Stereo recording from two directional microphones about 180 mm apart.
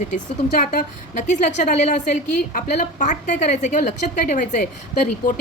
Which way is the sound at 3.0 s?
40° left (ahead or behind).